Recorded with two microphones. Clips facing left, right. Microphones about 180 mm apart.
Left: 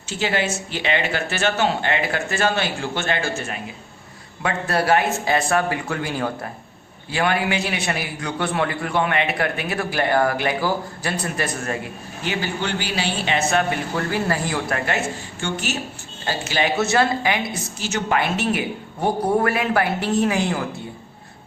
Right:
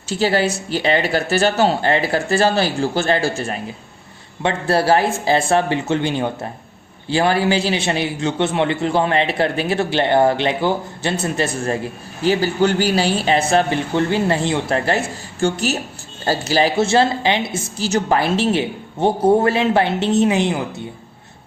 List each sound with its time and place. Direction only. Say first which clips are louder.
0.1 s a man's voice: right 5 dB; 35° right (ahead or behind); by 20.8 s 20° right (ahead or behind)